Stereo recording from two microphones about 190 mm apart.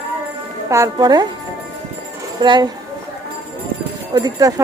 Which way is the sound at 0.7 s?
20° right (ahead or behind).